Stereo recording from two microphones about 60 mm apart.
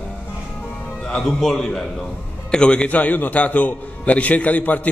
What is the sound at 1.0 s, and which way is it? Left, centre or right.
A man's voice, centre.